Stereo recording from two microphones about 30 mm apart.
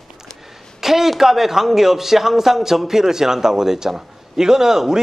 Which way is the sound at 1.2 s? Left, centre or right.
Centre.